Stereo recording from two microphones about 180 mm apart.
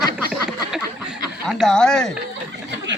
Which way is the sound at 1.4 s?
5° left (ahead or behind).